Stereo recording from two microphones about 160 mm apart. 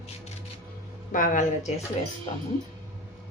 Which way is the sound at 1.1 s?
55° left (ahead or behind).